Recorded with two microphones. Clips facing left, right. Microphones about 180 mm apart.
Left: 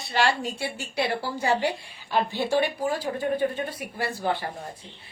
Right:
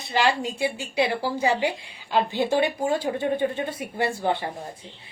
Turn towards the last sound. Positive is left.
turn(degrees=-25)  # may be behind; listen again after turning